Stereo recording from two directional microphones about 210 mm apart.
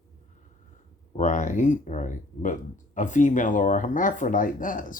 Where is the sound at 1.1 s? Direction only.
35° left (ahead or behind).